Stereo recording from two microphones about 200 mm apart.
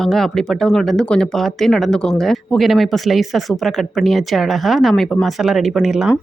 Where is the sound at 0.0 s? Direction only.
Centre (ahead or behind).